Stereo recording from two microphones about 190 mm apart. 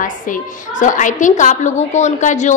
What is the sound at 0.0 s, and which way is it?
A woman's voice, 45° left (ahead or behind).